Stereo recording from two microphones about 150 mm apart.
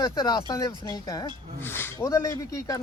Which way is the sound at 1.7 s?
15° left (ahead or behind).